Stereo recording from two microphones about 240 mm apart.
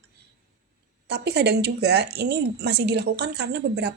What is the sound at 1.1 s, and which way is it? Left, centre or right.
Speech, right.